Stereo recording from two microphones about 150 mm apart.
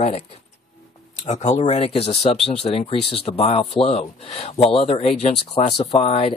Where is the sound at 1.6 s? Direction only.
40° left (ahead or behind).